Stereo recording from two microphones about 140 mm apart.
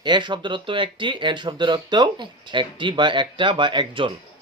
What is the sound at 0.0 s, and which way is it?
Speech, 35° right (ahead or behind).